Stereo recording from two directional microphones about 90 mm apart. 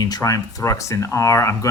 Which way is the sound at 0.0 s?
40° left (ahead or behind).